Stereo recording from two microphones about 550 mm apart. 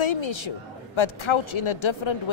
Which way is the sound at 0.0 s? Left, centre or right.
Left.